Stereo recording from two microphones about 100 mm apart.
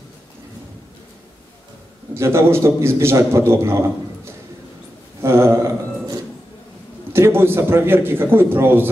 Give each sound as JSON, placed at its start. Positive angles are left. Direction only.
{"t": 2.1, "sound": "a man's voice", "side_deg": -25}
{"t": 7.1, "sound": "a man's voice", "side_deg": -25}